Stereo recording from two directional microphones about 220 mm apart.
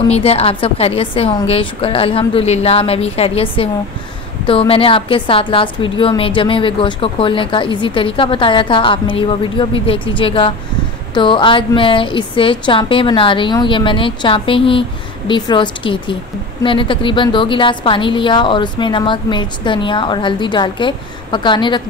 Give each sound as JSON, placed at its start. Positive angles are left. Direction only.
{"t": 0.1, "sound": "a woman's voice", "side_deg": 25}